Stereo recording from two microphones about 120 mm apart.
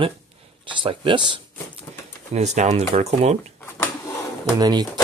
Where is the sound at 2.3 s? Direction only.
70° right (ahead or behind).